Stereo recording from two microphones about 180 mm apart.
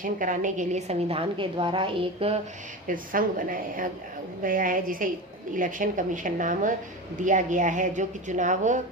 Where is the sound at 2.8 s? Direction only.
50° right (ahead or behind).